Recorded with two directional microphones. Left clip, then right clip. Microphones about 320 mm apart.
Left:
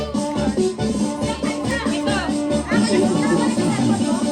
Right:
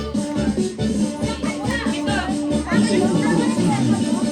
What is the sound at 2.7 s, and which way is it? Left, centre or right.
Music, centre.